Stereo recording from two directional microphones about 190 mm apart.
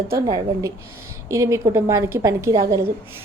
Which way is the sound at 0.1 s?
15° right (ahead or behind).